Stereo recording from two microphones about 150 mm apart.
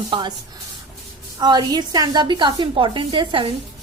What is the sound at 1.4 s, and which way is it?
A woman's voice, 30° right (ahead or behind).